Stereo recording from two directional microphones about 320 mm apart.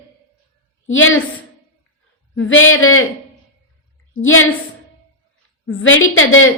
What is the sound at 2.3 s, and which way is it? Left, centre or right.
Speech, left.